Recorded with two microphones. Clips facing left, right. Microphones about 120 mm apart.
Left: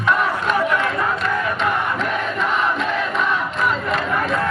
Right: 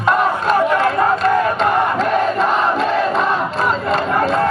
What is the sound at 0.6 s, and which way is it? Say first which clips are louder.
Battle cry: right 5 dB; 35° right (ahead or behind).